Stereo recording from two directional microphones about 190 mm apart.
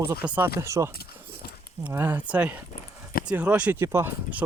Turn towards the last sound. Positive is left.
turn(degrees=-10)  # may be behind; listen again after turning